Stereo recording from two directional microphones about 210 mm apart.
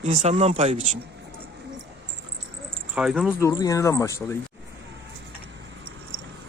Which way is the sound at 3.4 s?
15° left (ahead or behind).